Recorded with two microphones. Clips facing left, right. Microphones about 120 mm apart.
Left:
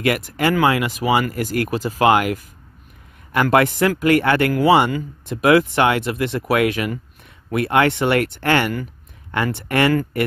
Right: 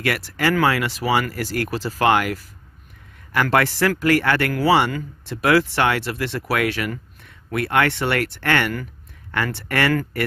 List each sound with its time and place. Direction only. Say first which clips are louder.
0.4 s speech: left 1 dB; 20° left (ahead or behind)
3.5 s speech: left 3 dB; 20° left (ahead or behind)